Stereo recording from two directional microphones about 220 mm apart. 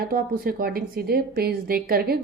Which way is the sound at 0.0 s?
45° right (ahead or behind).